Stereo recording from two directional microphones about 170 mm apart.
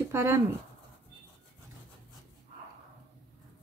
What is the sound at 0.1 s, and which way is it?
Speech, 15° right (ahead or behind).